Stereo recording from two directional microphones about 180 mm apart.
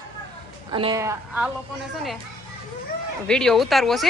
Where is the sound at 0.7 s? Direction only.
25° right (ahead or behind).